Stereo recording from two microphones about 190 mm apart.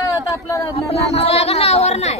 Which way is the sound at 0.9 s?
35° left (ahead or behind).